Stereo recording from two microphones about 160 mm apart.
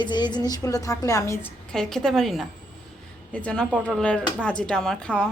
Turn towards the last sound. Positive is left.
turn(degrees=5)  # may be behind; listen again after turning